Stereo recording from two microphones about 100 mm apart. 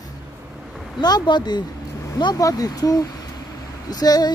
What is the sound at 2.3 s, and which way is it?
Speech, 35° left (ahead or behind).